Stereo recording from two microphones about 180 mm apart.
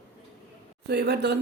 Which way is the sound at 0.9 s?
70° right (ahead or behind).